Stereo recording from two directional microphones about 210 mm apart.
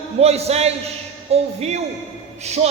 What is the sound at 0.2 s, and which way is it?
A man's voice, 30° right (ahead or behind).